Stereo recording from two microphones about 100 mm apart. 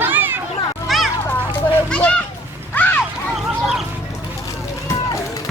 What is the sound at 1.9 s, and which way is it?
Children playing, 15° left (ahead or behind).